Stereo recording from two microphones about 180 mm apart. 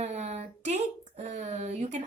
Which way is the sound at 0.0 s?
40° right (ahead or behind).